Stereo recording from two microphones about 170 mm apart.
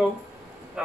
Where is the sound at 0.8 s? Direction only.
5° right (ahead or behind).